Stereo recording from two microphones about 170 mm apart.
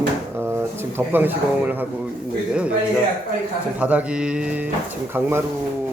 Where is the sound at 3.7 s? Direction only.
10° right (ahead or behind).